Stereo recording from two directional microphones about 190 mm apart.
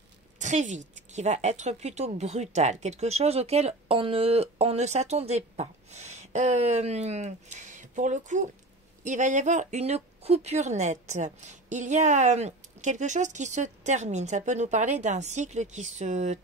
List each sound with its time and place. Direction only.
0.4 s a woman's voice: 40° right (ahead or behind)